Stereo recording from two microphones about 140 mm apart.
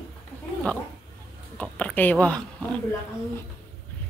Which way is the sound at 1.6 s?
10° left (ahead or behind).